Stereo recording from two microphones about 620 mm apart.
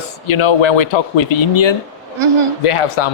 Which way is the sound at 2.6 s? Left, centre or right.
Left.